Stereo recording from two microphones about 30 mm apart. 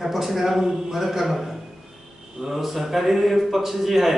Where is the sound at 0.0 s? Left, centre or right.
Centre.